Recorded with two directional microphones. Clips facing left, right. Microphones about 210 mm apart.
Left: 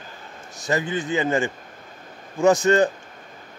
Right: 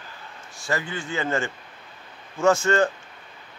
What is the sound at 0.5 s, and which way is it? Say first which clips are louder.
A man's voice: left 5 dB; 20° left (ahead or behind).